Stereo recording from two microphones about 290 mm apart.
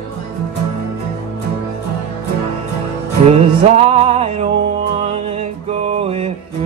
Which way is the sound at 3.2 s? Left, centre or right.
Centre.